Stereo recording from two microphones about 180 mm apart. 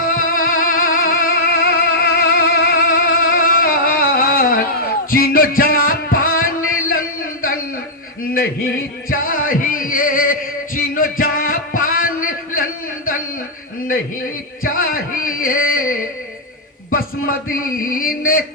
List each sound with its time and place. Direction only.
0.2 s music: 50° left (ahead or behind)
9.0 s music: 50° left (ahead or behind)
14.6 s music: 55° left (ahead or behind)
16.9 s a man's voice: 55° left (ahead or behind)